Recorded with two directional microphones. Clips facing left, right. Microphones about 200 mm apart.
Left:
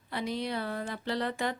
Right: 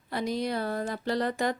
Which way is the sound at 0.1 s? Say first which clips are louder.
Right 4 dB; 40° right (ahead or behind).